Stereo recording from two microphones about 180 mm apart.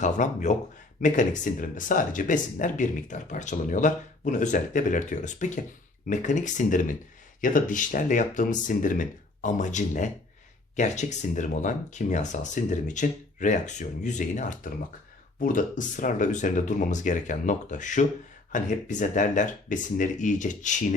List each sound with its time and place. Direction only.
0.0 s speech: 45° left (ahead or behind)